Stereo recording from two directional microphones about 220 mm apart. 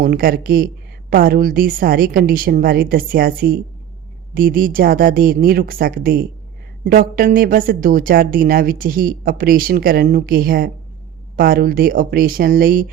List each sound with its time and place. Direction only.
0.0 s speech: 40° right (ahead or behind)